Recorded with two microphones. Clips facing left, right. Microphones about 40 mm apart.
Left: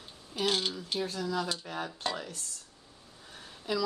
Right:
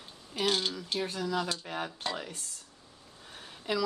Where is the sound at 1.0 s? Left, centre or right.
Right.